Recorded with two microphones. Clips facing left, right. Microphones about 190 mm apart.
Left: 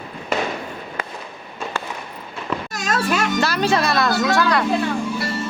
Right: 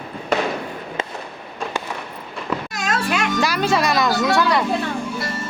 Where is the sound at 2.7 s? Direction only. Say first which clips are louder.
Left 3 dB; 40° left (ahead or behind).